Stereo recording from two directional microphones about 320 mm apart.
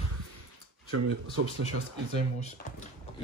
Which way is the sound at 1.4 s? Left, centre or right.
Right.